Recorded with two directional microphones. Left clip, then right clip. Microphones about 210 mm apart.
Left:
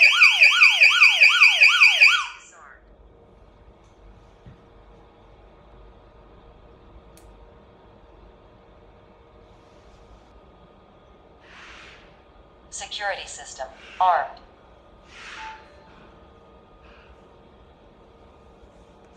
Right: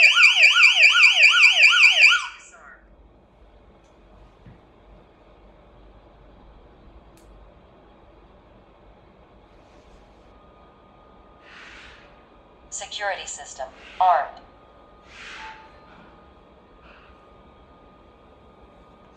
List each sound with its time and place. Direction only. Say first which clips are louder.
0.0 s emergency vehicle: even; 5° right (ahead or behind)
12.7 s a woman's voice: right 1 dB; 5° right (ahead or behind)